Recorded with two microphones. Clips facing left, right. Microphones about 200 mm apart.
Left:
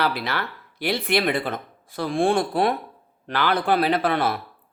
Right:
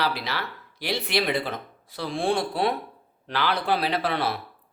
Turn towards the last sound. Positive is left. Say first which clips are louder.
# left 4 dB
turn(degrees=50)  # may be behind; listen again after turning